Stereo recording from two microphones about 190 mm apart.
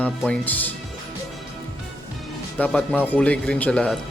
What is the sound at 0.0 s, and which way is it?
Speech, 5° left (ahead or behind).